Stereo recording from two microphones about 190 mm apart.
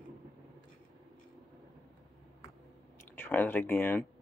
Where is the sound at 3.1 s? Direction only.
10° left (ahead or behind).